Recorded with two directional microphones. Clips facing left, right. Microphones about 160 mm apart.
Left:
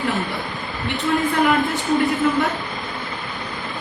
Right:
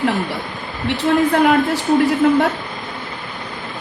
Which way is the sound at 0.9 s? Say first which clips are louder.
Right 6 dB; 75° right (ahead or behind).